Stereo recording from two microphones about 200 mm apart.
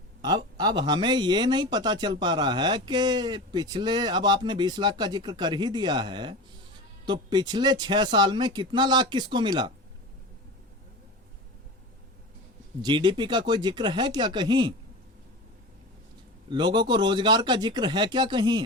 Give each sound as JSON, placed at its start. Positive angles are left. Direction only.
{"t": 0.2, "sound": "speech", "side_deg": -20}
{"t": 12.8, "sound": "speech", "side_deg": -20}
{"t": 16.5, "sound": "speech", "side_deg": -20}